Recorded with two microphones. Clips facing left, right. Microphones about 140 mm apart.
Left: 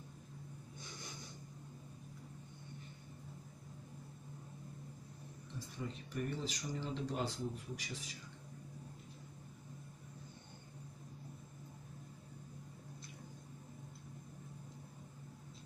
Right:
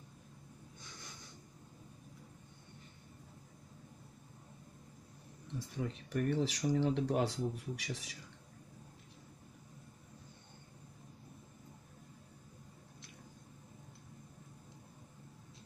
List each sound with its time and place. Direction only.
5.8 s speech: 80° right